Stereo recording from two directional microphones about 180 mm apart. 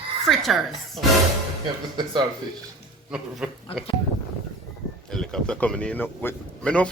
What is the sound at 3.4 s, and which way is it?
Speech, 5° right (ahead or behind).